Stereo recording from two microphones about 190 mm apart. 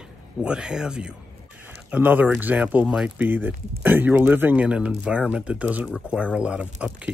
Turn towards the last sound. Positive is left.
turn(degrees=-5)  # may be behind; listen again after turning